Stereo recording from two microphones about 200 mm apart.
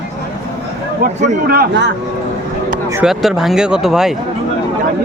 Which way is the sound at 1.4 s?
50° right (ahead or behind).